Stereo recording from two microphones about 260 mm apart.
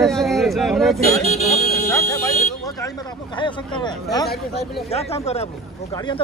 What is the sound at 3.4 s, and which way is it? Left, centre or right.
Speech, centre.